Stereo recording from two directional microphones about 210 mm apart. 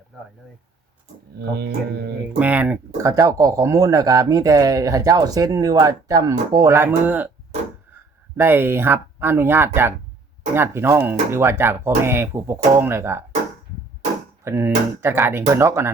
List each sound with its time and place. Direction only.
1.4 s speech: 50° right (ahead or behind)
2.4 s speech: 5° right (ahead or behind)
14.4 s speech: 10° right (ahead or behind)